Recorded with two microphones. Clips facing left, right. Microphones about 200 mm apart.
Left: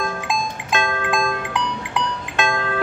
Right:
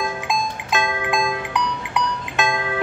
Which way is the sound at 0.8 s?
15° right (ahead or behind).